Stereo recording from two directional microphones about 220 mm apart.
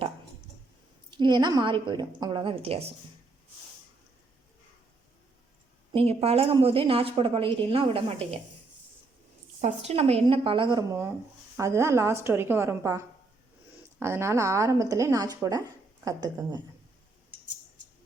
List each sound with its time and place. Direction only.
1.1 s a woman's voice: 20° right (ahead or behind)
5.9 s a woman's voice: 25° right (ahead or behind)
9.6 s a woman's voice: 30° right (ahead or behind)